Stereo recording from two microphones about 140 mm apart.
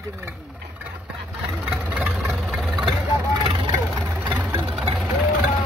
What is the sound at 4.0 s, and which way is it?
Vehicle, 15° right (ahead or behind).